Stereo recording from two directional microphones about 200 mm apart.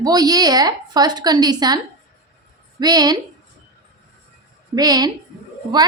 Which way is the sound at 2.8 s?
20° right (ahead or behind).